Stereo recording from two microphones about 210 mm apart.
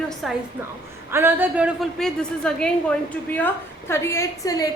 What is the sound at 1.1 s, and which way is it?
A woman's voice, 10° right (ahead or behind).